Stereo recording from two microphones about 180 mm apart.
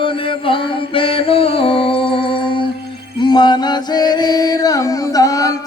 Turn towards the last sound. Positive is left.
turn(degrees=20)  # may be behind; listen again after turning